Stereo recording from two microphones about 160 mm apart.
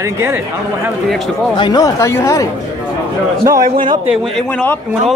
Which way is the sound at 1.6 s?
25° left (ahead or behind).